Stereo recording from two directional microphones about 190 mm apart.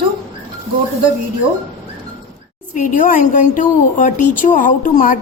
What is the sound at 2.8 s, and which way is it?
A woman's voice, 45° left (ahead or behind).